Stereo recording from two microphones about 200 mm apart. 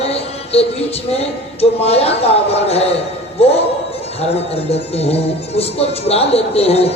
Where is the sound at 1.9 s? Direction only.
30° left (ahead or behind).